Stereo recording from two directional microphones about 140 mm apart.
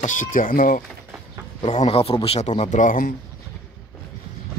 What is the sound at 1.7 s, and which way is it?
Speech, 50° left (ahead or behind).